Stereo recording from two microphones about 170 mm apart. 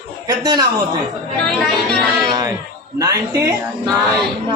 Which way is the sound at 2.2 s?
25° right (ahead or behind).